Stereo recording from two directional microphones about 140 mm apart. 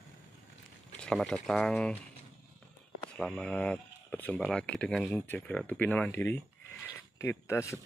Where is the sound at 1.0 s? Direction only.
5° left (ahead or behind).